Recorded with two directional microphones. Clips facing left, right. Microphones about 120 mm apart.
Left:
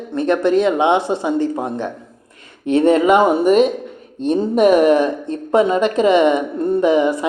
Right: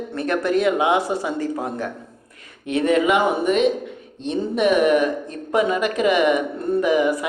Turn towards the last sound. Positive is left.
turn(degrees=25)  # may be behind; listen again after turning